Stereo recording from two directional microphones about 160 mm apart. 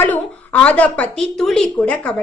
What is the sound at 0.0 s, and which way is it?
A woman's voice, 10° left (ahead or behind).